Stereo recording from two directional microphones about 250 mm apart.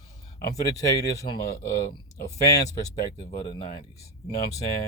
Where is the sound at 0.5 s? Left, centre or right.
Centre.